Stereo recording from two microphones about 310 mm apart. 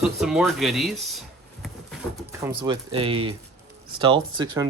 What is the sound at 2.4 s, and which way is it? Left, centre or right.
Speech, centre.